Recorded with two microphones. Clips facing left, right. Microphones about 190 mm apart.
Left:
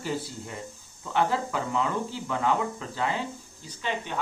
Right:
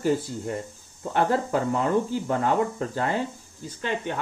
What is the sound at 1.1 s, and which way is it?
Speech, 45° right (ahead or behind).